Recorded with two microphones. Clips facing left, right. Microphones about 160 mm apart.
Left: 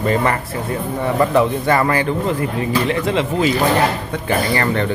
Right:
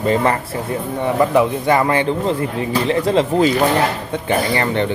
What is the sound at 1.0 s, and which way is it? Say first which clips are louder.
Speech: right 1 dB; 10° right (ahead or behind).